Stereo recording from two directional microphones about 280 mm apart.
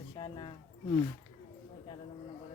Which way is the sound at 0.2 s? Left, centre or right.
Centre.